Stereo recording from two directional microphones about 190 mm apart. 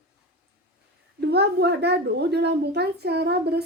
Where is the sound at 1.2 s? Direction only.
60° right (ahead or behind).